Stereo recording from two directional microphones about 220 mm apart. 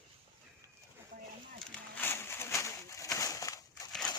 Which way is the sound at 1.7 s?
10° left (ahead or behind).